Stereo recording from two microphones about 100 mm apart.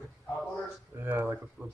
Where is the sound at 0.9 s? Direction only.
20° right (ahead or behind).